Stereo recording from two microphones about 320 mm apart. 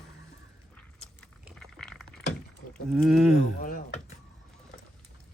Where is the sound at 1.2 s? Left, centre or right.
Centre.